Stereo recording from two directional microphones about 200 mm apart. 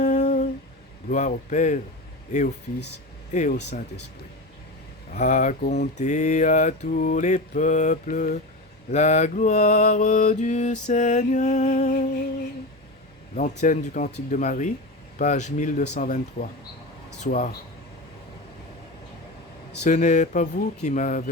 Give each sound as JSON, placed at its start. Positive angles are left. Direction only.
{"t": 0.0, "sound": "humming", "side_deg": 35}
{"t": 1.1, "sound": "mantra", "side_deg": 35}
{"t": 5.1, "sound": "mantra", "side_deg": 35}
{"t": 13.3, "sound": "mantra", "side_deg": 40}
{"t": 19.8, "sound": "mantra", "side_deg": 35}